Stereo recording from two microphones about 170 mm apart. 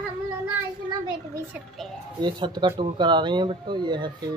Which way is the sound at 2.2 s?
25° right (ahead or behind).